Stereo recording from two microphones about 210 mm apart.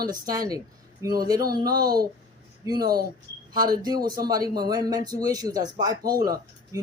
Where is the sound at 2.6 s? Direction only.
20° right (ahead or behind).